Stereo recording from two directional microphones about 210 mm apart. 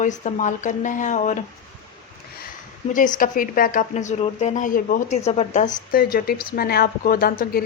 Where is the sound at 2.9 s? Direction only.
40° left (ahead or behind).